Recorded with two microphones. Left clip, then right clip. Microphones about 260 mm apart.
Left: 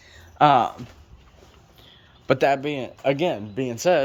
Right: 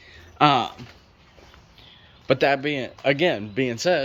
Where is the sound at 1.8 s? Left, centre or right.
Centre.